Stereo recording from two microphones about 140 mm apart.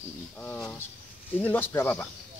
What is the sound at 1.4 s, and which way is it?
Speech, 15° left (ahead or behind).